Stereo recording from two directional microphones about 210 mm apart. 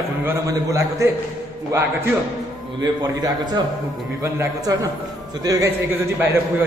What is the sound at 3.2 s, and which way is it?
A man's voice, 20° right (ahead or behind).